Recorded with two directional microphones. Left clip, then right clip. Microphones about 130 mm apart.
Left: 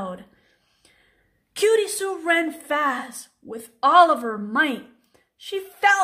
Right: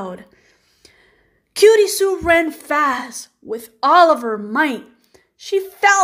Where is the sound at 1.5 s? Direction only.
30° right (ahead or behind).